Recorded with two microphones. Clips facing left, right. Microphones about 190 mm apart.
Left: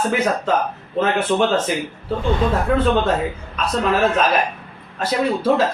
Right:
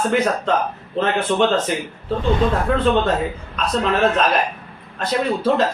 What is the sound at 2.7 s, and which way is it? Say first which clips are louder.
Speech: left 2 dB; 5° left (ahead or behind).